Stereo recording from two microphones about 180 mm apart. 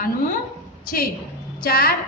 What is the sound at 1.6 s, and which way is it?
Speech, 55° left (ahead or behind).